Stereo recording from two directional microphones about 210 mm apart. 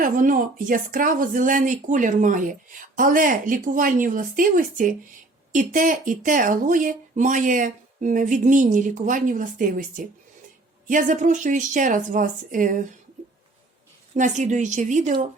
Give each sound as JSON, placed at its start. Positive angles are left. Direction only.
{"t": 0.0, "sound": "speech", "side_deg": -40}
{"t": 14.2, "sound": "speech", "side_deg": -35}